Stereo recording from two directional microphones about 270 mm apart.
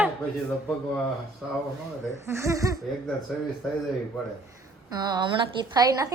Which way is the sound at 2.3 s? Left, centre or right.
Centre.